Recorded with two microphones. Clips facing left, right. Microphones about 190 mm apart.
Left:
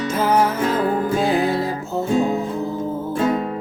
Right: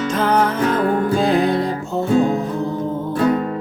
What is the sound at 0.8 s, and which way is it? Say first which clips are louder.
Music: right 2 dB; 30° left (ahead or behind).